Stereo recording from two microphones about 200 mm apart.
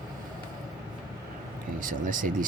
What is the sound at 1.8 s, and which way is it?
Speech, 40° right (ahead or behind).